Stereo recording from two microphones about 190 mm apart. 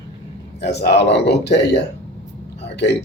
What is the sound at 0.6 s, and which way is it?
Speech, 60° left (ahead or behind).